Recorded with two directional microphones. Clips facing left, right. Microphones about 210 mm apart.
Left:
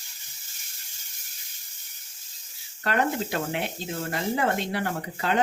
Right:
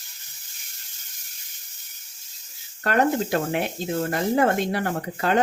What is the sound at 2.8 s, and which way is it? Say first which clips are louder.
Speech: right 5 dB; 45° right (ahead or behind).